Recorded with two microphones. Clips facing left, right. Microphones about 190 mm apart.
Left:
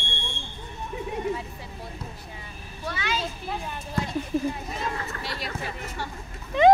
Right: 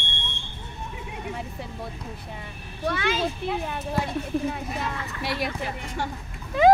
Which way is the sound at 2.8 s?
55° right (ahead or behind).